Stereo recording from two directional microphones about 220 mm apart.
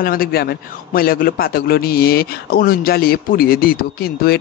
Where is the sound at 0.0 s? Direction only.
40° left (ahead or behind).